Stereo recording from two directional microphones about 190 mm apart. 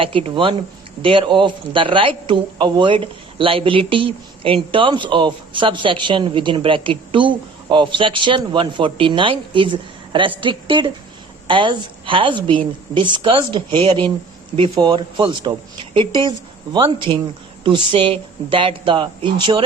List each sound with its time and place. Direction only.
0.0 s a woman's voice: 30° right (ahead or behind)